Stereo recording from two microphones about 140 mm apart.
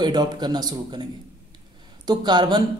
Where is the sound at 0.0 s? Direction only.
30° right (ahead or behind).